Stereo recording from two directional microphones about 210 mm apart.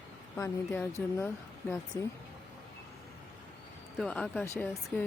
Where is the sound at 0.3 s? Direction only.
10° left (ahead or behind).